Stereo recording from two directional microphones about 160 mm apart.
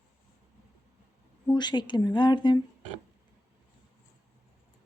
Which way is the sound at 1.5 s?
30° left (ahead or behind).